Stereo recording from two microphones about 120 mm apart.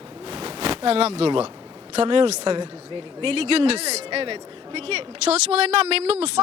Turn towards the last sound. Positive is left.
turn(degrees=-60)  # may be behind; listen again after turning